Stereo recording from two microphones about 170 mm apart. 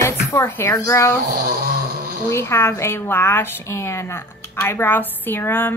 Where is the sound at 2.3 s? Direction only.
15° left (ahead or behind).